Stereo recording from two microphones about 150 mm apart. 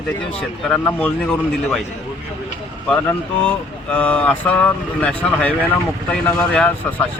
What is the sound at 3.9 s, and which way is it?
Speech, 10° left (ahead or behind).